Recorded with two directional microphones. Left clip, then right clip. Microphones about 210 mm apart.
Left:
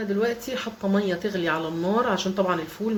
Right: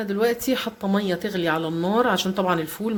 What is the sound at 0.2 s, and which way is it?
Speech, 40° right (ahead or behind).